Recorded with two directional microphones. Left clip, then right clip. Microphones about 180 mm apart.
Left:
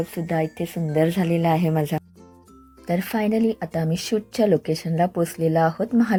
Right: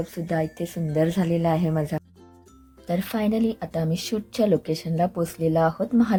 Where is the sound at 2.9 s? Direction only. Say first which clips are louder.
Left 2 dB; 10° left (ahead or behind).